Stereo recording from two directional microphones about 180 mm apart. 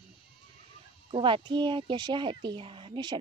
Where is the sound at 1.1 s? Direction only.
30° right (ahead or behind).